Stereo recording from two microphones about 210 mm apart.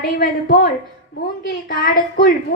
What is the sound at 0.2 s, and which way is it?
A woman's voice, 45° left (ahead or behind).